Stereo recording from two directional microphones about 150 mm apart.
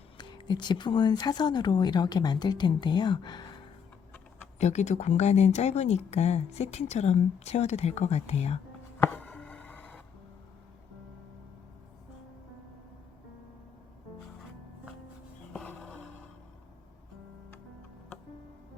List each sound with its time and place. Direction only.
0.2 s speech: 30° left (ahead or behind)
4.5 s speech: 50° left (ahead or behind)
9.0 s chopping: 10° left (ahead or behind)
15.5 s music: 5° left (ahead or behind)